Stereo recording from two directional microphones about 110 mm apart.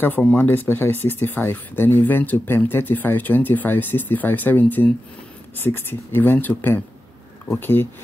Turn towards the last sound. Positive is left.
turn(degrees=20)  # may be behind; listen again after turning